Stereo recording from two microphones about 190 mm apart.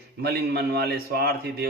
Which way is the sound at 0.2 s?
55° right (ahead or behind).